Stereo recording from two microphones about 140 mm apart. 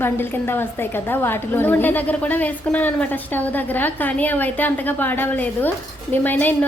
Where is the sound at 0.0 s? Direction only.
15° left (ahead or behind).